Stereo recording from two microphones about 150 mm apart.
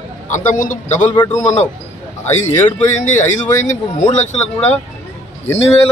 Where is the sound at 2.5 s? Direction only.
15° left (ahead or behind).